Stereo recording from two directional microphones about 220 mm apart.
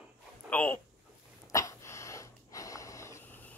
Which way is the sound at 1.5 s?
15° left (ahead or behind).